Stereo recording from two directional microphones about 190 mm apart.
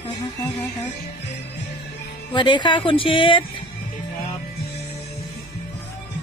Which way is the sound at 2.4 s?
25° left (ahead or behind).